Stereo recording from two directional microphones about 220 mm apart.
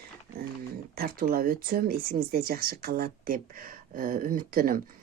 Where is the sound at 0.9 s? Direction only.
45° right (ahead or behind).